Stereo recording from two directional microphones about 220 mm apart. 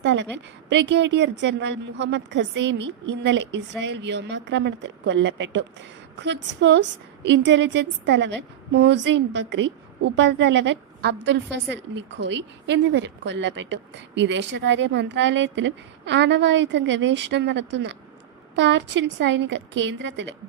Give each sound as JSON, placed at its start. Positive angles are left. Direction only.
{"t": 0.0, "sound": "a woman's voice", "side_deg": -55}